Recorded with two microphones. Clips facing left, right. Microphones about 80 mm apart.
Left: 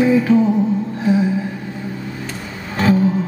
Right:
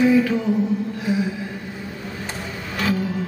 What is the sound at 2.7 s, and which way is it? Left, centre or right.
Music, left.